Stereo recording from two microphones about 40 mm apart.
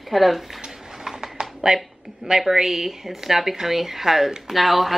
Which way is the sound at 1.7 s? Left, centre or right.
Centre.